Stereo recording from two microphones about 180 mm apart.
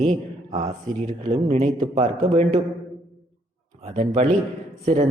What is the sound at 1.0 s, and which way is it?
A woman's voice, 40° right (ahead or behind).